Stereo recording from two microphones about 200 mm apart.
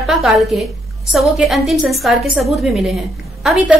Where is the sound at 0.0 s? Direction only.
Centre (ahead or behind).